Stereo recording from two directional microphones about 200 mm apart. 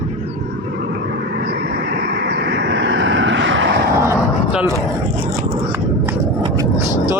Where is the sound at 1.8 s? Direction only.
55° right (ahead or behind).